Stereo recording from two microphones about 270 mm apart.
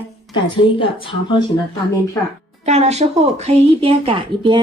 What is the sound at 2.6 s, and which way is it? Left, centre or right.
A woman's voice, right.